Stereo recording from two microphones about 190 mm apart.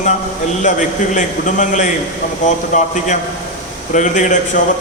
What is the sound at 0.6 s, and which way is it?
A man's voice, 40° left (ahead or behind).